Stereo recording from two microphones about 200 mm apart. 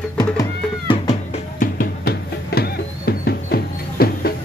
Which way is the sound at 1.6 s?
50° left (ahead or behind).